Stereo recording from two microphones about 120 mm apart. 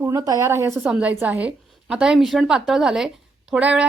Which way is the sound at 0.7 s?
5° right (ahead or behind).